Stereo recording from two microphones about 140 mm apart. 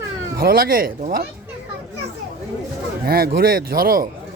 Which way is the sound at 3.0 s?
90° right.